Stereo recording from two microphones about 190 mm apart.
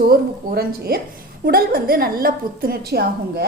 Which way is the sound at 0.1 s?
55° right (ahead or behind).